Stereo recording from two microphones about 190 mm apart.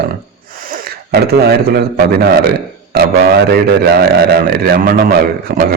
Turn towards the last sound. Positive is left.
turn(degrees=-50)  # may be behind; listen again after turning